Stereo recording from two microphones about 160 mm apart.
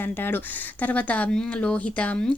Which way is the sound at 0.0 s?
15° left (ahead or behind).